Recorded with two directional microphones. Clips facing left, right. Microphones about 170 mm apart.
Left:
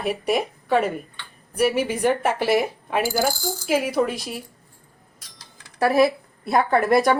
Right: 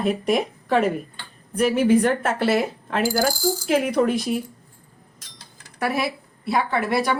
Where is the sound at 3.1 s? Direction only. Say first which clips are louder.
Right 2 dB; centre (ahead or behind).